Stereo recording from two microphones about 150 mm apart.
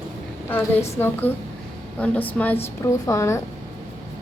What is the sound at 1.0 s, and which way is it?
A woman's voice, 15° left (ahead or behind).